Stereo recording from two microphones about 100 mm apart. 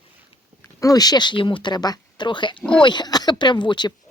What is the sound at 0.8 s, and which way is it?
Speech, 40° left (ahead or behind).